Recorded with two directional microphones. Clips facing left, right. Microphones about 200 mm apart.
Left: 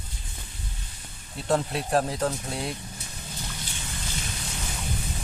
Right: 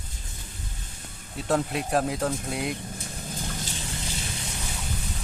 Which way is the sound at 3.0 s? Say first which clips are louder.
Right 4 dB; 45° right (ahead or behind).